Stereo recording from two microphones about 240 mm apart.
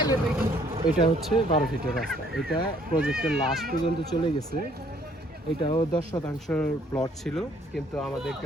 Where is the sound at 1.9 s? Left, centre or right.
Centre.